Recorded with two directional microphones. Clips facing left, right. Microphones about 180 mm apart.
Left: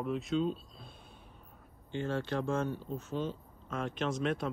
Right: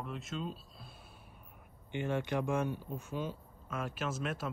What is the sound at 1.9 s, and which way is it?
Speech, 15° right (ahead or behind).